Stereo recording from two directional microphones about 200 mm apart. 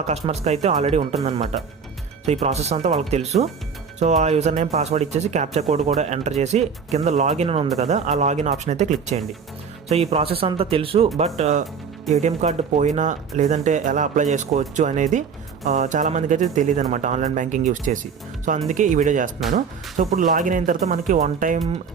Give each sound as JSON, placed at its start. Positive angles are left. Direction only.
{"t": 0.3, "sound": "speech", "side_deg": -35}